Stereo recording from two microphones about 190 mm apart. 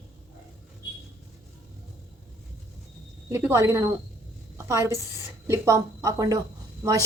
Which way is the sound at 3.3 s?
15° right (ahead or behind).